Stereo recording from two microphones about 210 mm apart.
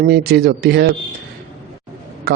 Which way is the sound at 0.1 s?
50° right (ahead or behind).